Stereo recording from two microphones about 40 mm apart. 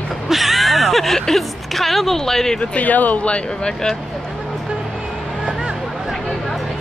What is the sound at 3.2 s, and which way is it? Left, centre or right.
Speech, left.